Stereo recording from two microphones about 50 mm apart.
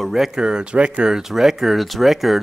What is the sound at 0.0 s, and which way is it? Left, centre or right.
Speech, centre.